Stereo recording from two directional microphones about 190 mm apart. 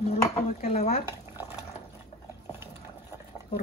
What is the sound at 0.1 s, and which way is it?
Dishes, 35° left (ahead or behind).